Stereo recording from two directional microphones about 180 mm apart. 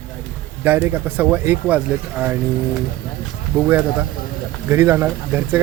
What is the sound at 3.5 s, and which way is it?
Speech, 15° right (ahead or behind).